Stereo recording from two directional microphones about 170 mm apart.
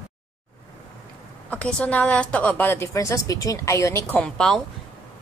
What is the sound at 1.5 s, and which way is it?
A woman's voice, 5° left (ahead or behind).